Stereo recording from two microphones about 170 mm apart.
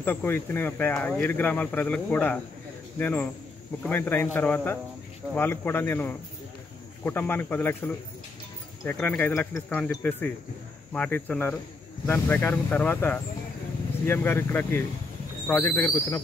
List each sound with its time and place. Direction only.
0.0 s speech: 10° left (ahead or behind)